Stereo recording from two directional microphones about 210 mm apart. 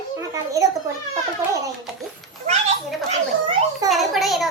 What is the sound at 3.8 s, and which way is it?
Speech, centre (ahead or behind).